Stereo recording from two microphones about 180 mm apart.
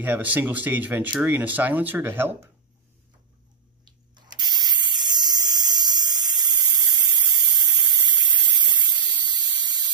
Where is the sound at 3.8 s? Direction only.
25° right (ahead or behind).